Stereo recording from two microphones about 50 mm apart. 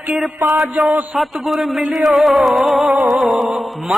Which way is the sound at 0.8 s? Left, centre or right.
Centre.